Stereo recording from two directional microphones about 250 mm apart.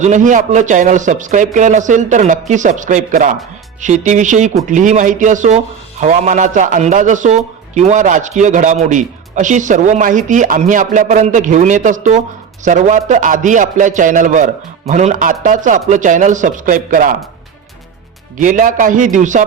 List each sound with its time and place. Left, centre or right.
0.0 s a man's voice: right
18.3 s a man's voice: right